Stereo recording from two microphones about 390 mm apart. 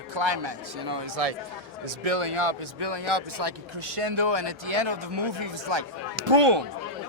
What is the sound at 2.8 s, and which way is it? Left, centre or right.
Speech, right.